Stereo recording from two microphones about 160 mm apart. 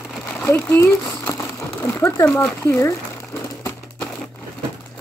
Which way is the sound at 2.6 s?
20° left (ahead or behind).